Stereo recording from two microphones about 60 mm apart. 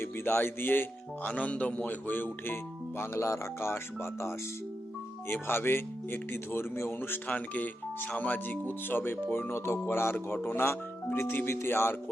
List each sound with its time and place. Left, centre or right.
0.0 s speech: left
1.3 s a man's voice: left
3.2 s speech: left
7.3 s speech: left